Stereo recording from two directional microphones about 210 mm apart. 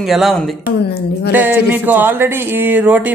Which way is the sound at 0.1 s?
Centre (ahead or behind).